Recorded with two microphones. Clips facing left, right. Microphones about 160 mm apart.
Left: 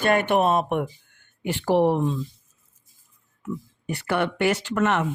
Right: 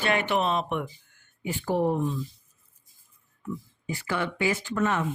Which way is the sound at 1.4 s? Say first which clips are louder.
Left 6 dB; 80° left.